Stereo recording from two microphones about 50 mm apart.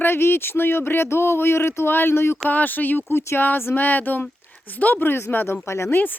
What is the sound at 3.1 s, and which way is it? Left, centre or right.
Speech, left.